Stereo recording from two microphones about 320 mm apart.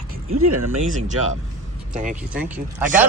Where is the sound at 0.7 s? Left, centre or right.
Right.